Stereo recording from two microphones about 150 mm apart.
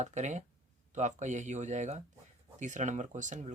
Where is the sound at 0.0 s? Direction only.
50° right (ahead or behind).